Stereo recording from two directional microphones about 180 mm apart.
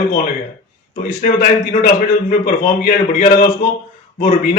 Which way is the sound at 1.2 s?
50° left (ahead or behind).